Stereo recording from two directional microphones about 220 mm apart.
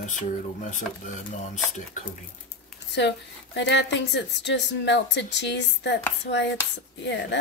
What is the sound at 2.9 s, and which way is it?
A woman's voice, 50° left (ahead or behind).